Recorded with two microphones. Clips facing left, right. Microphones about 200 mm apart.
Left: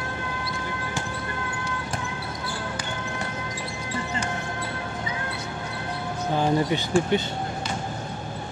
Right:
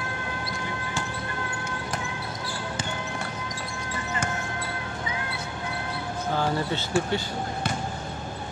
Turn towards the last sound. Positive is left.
turn(degrees=15)  # may be behind; listen again after turning